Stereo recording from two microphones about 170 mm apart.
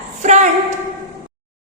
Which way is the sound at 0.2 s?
45° right (ahead or behind).